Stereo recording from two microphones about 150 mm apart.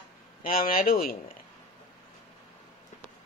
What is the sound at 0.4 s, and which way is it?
Speech, 70° left (ahead or behind).